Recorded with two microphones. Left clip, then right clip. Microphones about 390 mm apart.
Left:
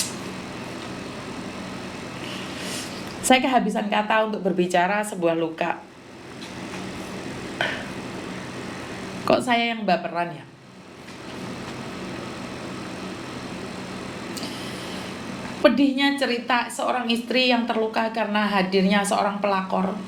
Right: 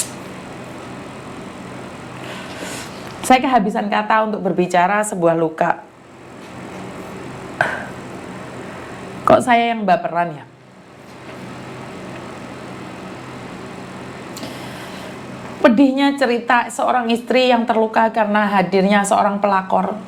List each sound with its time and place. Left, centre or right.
3.2 s a woman's voice: centre
9.2 s a woman's voice: right
15.6 s a woman's voice: right